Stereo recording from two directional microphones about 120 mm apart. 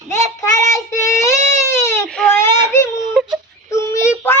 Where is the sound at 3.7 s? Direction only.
25° left (ahead or behind).